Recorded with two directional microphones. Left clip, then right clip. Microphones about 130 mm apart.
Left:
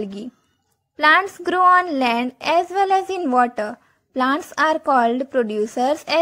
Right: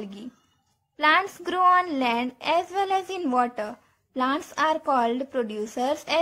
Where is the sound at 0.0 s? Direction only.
40° left (ahead or behind).